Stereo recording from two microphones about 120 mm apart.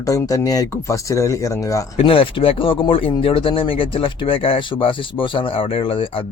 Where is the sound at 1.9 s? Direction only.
50° left (ahead or behind).